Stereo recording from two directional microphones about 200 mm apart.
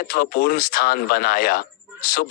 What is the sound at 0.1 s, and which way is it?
Speech, 50° left (ahead or behind).